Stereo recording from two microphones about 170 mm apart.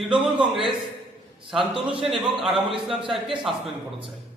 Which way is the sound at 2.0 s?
Centre (ahead or behind).